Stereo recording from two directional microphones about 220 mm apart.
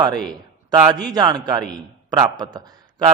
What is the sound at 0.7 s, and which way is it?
A man's voice, 15° right (ahead or behind).